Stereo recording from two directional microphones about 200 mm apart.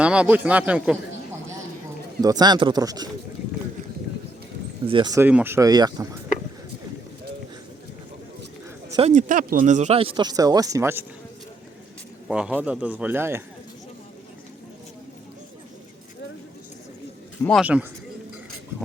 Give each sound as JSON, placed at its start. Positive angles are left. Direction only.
{"t": 0.0, "sound": "speech", "side_deg": -5}
{"t": 2.2, "sound": "speech", "side_deg": -20}
{"t": 4.9, "sound": "speech", "side_deg": -20}
{"t": 8.9, "sound": "speech", "side_deg": -30}
{"t": 12.3, "sound": "speech", "side_deg": -5}
{"t": 17.6, "sound": "speech", "side_deg": -5}